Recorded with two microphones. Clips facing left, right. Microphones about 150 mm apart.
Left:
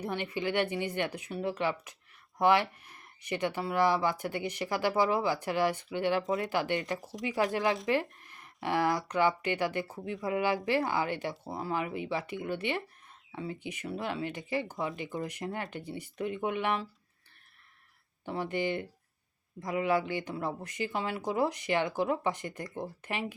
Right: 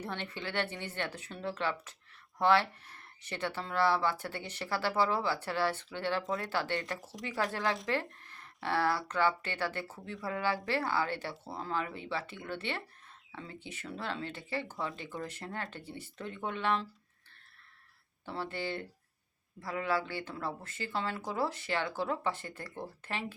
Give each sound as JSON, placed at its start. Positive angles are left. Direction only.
{"t": 0.0, "sound": "speech", "side_deg": 10}
{"t": 18.3, "sound": "speech", "side_deg": 15}